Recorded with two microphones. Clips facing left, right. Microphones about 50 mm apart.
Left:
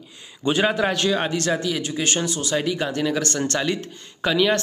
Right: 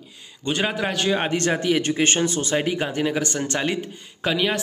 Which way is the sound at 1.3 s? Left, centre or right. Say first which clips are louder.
Right 2 dB; right.